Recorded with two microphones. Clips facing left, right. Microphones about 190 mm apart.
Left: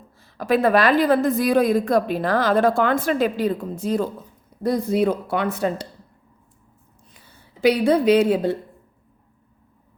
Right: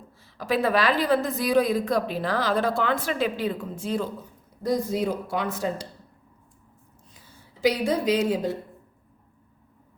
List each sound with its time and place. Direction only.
0.2 s a woman's voice: 50° left (ahead or behind)
4.6 s speech: 60° left (ahead or behind)
7.6 s speech: 60° left (ahead or behind)